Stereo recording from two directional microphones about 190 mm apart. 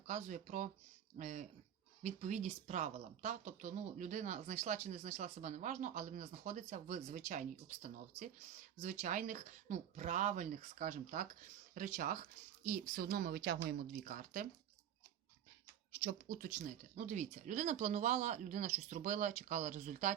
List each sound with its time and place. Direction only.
0.1 s a woman's voice: 40° right (ahead or behind); by 13.7 s 60° right (ahead or behind)
14.0 s speech: 45° right (ahead or behind)
16.0 s speech: 50° right (ahead or behind)